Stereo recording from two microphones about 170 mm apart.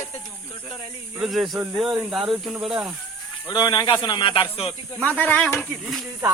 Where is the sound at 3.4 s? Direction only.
25° left (ahead or behind).